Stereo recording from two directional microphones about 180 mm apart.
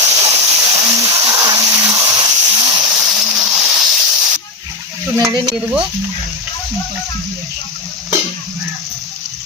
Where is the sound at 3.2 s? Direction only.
5° right (ahead or behind).